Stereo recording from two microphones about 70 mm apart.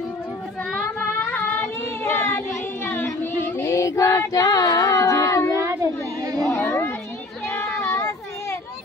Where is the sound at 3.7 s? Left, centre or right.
Left.